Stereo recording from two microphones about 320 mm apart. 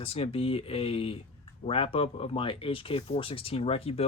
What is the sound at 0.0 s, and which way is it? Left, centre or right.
Speech, centre.